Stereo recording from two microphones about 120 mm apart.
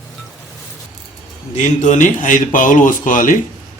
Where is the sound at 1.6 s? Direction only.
90° left.